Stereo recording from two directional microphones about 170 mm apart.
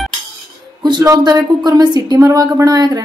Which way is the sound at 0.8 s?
25° right (ahead or behind).